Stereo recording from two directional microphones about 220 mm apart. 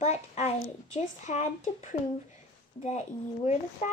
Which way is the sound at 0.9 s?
30° left (ahead or behind).